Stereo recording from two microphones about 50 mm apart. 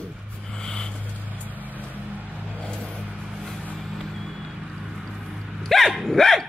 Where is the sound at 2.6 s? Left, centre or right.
Centre.